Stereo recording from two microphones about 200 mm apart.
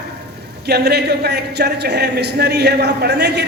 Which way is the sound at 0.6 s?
55° right (ahead or behind).